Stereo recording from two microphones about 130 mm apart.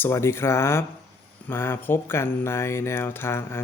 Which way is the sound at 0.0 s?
20° left (ahead or behind).